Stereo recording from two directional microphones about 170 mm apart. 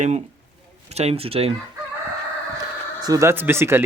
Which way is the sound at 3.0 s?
15° right (ahead or behind).